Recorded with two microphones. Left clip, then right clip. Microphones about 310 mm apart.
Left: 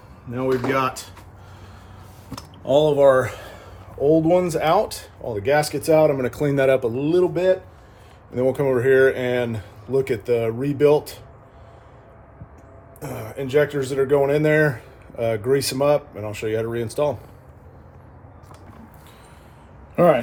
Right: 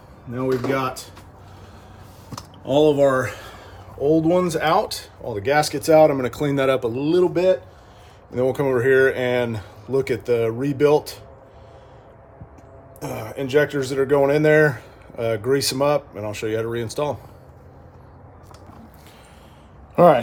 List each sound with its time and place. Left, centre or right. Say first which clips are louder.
0.3 s speech: left 1 dB; left
2.6 s speech: left 1 dB; centre
13.0 s speech: right 2 dB; centre